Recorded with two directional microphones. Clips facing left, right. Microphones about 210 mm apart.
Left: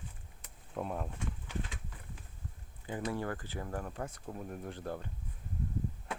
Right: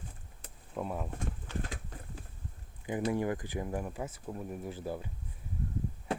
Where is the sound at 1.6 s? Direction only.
40° right (ahead or behind).